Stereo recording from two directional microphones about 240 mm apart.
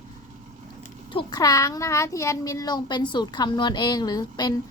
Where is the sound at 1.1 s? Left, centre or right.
Centre.